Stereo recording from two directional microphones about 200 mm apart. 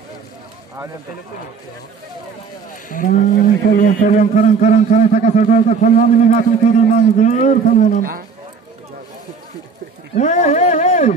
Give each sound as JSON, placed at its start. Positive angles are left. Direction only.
{"t": 2.9, "sound": "a man's voice", "side_deg": 40}
{"t": 10.1, "sound": "speech", "side_deg": 35}